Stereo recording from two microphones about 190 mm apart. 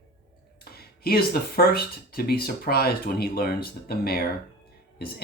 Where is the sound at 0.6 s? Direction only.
55° left (ahead or behind).